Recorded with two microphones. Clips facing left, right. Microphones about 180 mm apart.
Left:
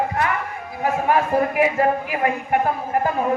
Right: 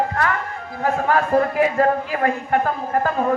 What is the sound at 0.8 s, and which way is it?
A man's voice, 15° left (ahead or behind).